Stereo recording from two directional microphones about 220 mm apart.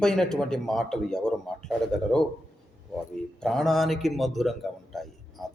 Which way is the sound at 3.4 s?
Centre (ahead or behind).